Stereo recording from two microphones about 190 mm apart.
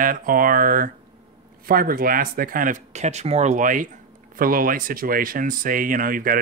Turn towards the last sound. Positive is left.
turn(degrees=-45)  # may be behind; listen again after turning